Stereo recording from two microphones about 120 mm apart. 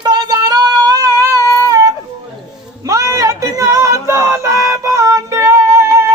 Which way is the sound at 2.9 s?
25° right (ahead or behind).